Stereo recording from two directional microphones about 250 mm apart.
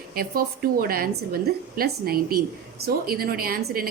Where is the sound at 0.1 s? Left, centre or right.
Right.